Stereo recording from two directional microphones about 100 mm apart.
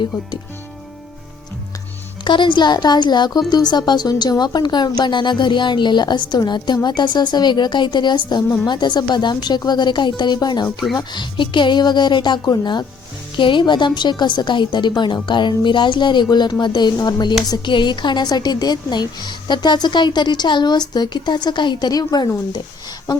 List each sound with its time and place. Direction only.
2.2 s a woman's voice: 55° left (ahead or behind)